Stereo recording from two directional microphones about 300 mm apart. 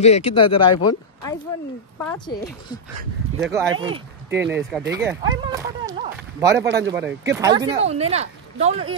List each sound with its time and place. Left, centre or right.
0.0 s speech: left
3.3 s speech: centre
3.8 s speech: centre
6.6 s speech: right
6.9 s speech: centre